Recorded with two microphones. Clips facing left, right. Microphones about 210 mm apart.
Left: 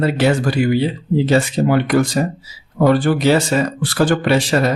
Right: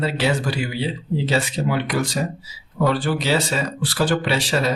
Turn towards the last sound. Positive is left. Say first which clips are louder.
# left 6 dB
turn(degrees=50)  # may be behind; listen again after turning